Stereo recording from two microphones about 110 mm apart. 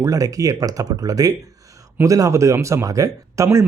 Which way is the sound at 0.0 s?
30° right (ahead or behind).